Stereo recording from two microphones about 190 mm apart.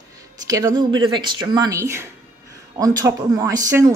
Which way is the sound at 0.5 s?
20° right (ahead or behind).